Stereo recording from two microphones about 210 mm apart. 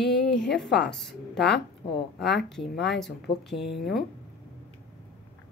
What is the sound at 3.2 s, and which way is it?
Speech, 55° left (ahead or behind).